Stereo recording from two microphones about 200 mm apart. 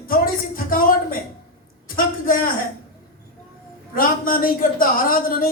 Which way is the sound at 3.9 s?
45° left (ahead or behind).